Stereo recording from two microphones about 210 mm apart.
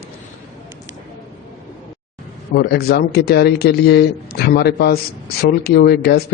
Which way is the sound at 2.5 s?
50° left (ahead or behind).